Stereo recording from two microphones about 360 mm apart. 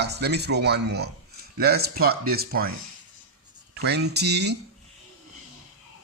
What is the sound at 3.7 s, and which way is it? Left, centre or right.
Speech, right.